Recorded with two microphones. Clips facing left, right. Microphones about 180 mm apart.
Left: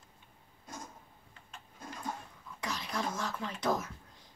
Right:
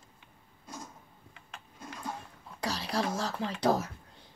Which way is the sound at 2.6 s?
35° right (ahead or behind).